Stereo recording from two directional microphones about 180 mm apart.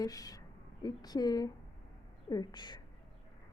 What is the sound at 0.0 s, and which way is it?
A woman's voice, 20° left (ahead or behind).